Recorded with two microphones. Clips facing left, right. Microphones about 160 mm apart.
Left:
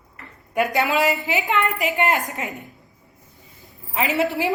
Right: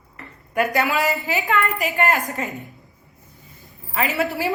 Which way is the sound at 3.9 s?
20° left (ahead or behind).